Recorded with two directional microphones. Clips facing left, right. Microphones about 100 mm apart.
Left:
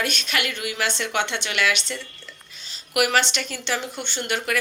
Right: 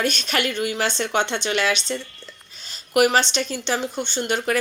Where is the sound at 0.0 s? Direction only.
40° right (ahead or behind).